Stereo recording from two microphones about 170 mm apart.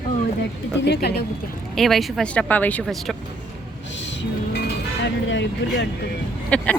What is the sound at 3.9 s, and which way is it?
Music, 90° left.